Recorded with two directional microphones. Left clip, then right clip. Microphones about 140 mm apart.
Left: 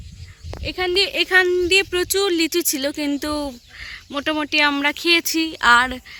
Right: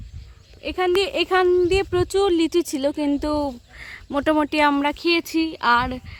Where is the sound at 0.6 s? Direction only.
10° right (ahead or behind).